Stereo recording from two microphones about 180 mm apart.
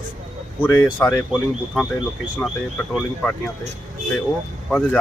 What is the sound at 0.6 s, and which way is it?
Speech, 15° left (ahead or behind).